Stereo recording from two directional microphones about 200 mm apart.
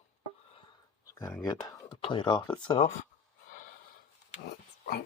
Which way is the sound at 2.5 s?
25° left (ahead or behind).